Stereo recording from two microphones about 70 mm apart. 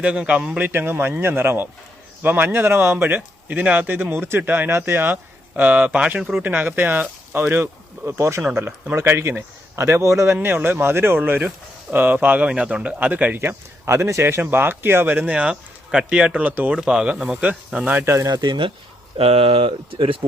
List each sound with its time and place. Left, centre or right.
0.0 s speech: centre
0.7 s speech: right
3.2 s a man's voice: centre; by 10.3 s right
10.4 s speech: right
16.7 s speech: centre
18.0 s speech: right
18.3 s speech: right